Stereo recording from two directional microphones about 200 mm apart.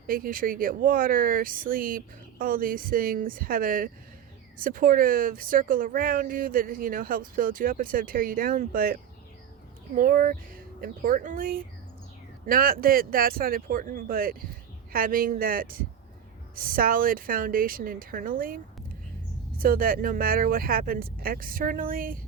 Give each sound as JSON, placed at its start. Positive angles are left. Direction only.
{"t": 0.1, "sound": "speech", "side_deg": -45}